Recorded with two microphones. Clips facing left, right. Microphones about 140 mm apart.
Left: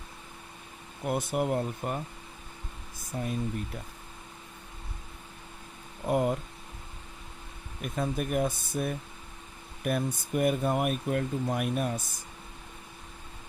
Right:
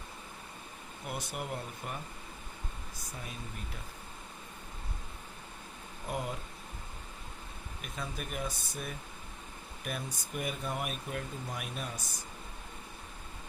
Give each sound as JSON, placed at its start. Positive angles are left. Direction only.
{"t": 1.0, "sound": "speech", "side_deg": 50}
{"t": 3.1, "sound": "speech", "side_deg": 40}
{"t": 6.1, "sound": "speech", "side_deg": 50}
{"t": 7.8, "sound": "speech", "side_deg": 50}